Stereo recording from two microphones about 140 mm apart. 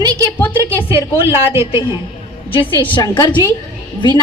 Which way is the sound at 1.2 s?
15° right (ahead or behind).